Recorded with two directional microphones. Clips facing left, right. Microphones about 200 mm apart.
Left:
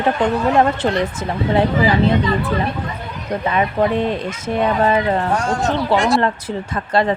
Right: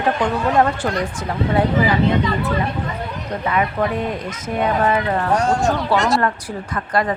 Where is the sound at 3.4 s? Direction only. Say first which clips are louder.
Left 2 dB; 25° left (ahead or behind).